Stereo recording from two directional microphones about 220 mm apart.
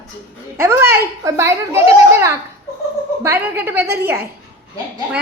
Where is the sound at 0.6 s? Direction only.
10° right (ahead or behind).